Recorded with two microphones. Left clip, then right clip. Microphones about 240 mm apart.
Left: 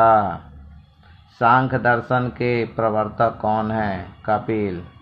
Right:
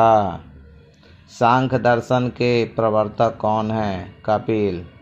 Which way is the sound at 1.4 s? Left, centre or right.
Right.